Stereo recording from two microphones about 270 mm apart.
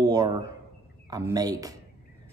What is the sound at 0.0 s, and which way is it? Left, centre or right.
Speech, centre.